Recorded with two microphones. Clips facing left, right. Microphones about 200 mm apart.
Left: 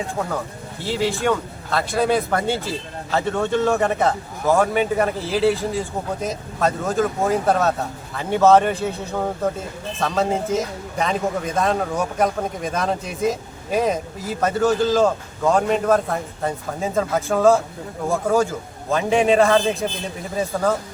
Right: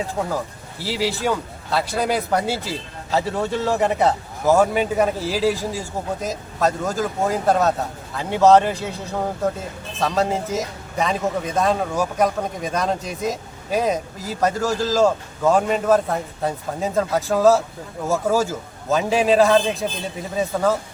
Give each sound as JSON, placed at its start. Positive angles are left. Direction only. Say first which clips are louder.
{"t": 0.2, "sound": "speech", "louder": "right 1 dB", "side_deg": -15}
{"t": 0.8, "sound": "a man's voice", "louder": "left 1 dB", "side_deg": -5}